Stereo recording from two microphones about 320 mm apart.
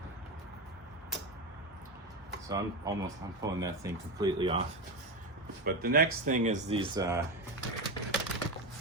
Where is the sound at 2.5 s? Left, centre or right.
Centre.